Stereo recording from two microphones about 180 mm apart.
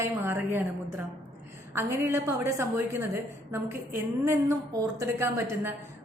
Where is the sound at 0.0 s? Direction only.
15° right (ahead or behind).